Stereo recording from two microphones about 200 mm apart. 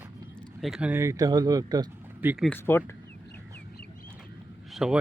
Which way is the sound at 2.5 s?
10° left (ahead or behind).